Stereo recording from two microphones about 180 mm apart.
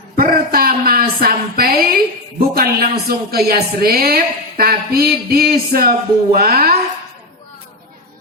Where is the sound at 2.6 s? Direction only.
60° right (ahead or behind).